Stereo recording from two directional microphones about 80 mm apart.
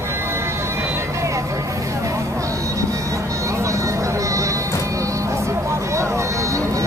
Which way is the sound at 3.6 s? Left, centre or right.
Right.